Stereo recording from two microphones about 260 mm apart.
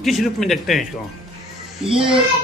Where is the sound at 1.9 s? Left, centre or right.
Centre.